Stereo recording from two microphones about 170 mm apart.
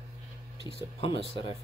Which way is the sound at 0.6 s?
30° left (ahead or behind).